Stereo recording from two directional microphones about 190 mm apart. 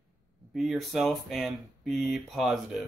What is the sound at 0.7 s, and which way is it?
Speech, centre (ahead or behind).